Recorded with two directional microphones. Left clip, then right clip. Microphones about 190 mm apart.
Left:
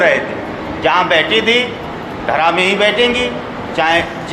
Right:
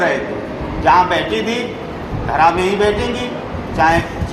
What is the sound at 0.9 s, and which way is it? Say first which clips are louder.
A man's voice: even; 15° left (ahead or behind).